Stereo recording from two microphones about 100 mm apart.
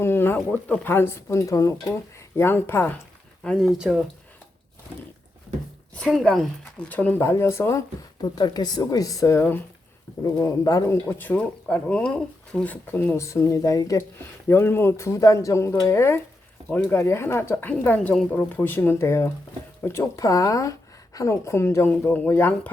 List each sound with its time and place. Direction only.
0.0 s a sound: 25° left (ahead or behind)
0.5 s speech: 15° left (ahead or behind)
3.4 s speech: 10° left (ahead or behind)
3.7 s speech: 5° right (ahead or behind)
6.2 s speech: 5° left (ahead or behind)
7.2 s speech: 25° left (ahead or behind)
8.2 s speech: 45° left (ahead or behind)
10.8 s speech: 20° left (ahead or behind)
13.1 s speech: 30° left (ahead or behind)